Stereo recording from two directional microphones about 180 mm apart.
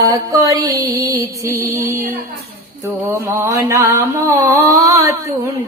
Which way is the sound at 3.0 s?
15° right (ahead or behind).